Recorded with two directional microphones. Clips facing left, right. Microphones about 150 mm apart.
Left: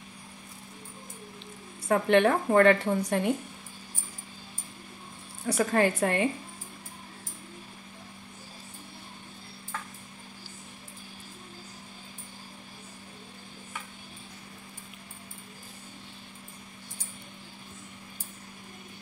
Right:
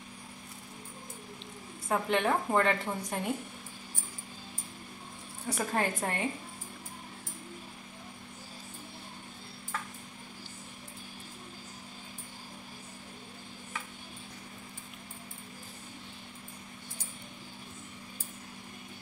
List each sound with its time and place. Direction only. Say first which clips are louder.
1.9 s a woman's voice: left 6 dB; 70° left (ahead or behind)
5.5 s a woman's voice: left 7 dB; 80° left